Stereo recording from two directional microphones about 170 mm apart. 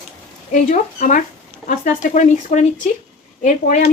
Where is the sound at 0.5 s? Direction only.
50° left (ahead or behind).